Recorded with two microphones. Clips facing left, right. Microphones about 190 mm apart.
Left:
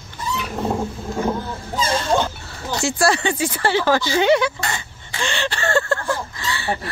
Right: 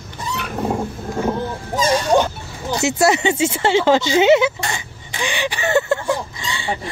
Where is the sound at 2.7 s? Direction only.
20° right (ahead or behind).